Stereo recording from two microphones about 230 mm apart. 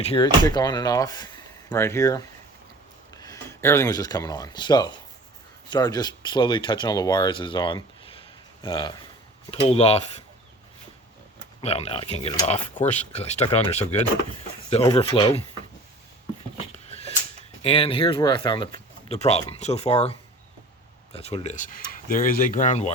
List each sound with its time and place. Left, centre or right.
0.0 s speech: left
11.6 s speech: left
14.7 s speech: left
16.7 s a sound: left
17.6 s speech: left